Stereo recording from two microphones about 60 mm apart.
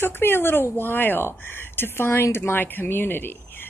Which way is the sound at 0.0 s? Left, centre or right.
Left.